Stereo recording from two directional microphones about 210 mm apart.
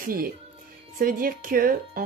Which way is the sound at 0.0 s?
45° right (ahead or behind).